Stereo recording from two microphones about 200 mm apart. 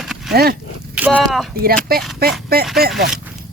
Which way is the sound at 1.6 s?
50° right (ahead or behind).